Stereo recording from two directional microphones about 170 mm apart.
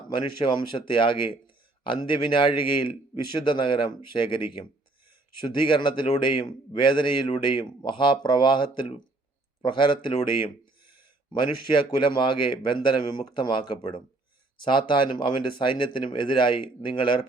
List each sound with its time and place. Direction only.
0.3 s speech: 30° left (ahead or behind)
11.3 s speech: 30° left (ahead or behind)